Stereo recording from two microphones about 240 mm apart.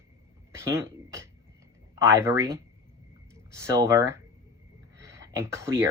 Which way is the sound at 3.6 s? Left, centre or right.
Centre.